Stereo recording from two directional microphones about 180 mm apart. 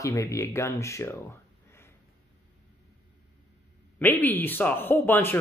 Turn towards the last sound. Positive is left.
turn(degrees=10)  # may be behind; listen again after turning